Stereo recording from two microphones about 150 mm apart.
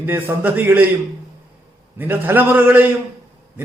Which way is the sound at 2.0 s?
15° right (ahead or behind).